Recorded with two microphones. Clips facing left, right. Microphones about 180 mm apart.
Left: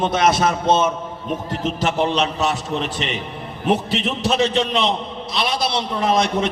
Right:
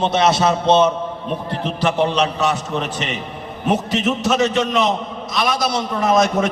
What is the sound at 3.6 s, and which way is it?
Speech, 40° right (ahead or behind).